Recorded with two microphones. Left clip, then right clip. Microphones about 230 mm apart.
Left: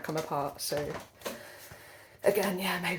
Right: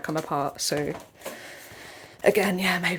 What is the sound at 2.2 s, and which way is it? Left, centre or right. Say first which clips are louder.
Speech: right 6 dB; right.